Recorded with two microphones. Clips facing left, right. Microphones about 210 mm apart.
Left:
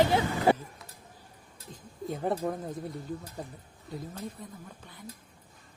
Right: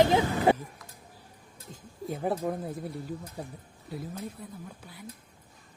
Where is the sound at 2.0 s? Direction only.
5° right (ahead or behind).